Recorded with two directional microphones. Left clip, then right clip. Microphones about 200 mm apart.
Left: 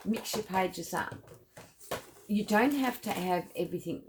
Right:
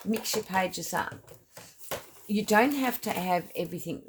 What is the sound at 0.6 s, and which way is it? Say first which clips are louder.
Speech: right 2 dB; 45° right (ahead or behind).